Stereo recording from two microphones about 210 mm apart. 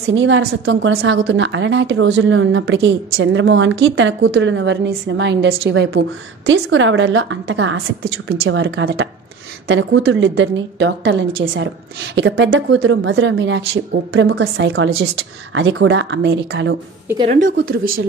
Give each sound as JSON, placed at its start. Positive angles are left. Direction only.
{"t": 0.1, "sound": "speech", "side_deg": -65}